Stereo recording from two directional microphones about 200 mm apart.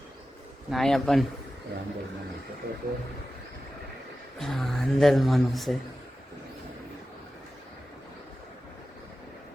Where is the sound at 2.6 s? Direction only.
55° right (ahead or behind).